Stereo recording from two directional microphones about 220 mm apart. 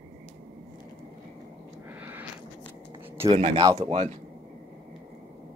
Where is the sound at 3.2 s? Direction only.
25° right (ahead or behind).